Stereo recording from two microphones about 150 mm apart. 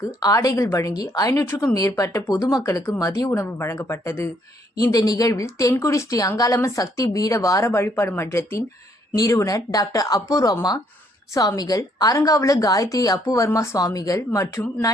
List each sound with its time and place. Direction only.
0.2 s speech: 25° left (ahead or behind)